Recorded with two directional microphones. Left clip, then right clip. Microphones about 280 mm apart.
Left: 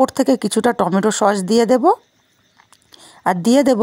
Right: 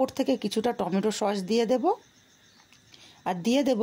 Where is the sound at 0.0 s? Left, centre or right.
Left.